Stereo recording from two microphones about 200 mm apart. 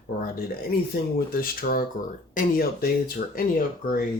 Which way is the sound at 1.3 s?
45° left (ahead or behind).